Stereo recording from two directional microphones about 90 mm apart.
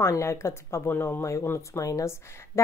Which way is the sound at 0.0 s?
35° left (ahead or behind).